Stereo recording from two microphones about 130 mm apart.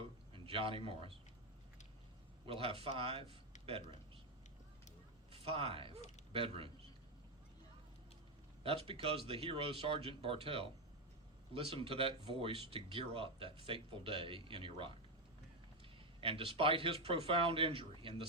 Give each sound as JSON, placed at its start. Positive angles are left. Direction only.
{"t": 0.3, "sound": "a sound", "side_deg": -45}
{"t": 2.5, "sound": "speech", "side_deg": -45}
{"t": 5.3, "sound": "a man's voice", "side_deg": -45}
{"t": 6.0, "sound": "speech", "side_deg": 65}
{"t": 6.3, "sound": "speech", "side_deg": -45}
{"t": 8.6, "sound": "speech", "side_deg": -45}
{"t": 16.2, "sound": "speech", "side_deg": -45}